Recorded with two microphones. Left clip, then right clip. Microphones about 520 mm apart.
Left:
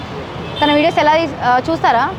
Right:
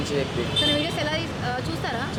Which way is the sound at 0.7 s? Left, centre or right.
Left.